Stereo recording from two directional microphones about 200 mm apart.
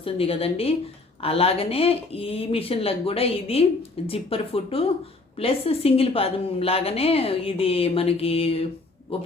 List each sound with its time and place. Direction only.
0.0 s speech: 30° left (ahead or behind)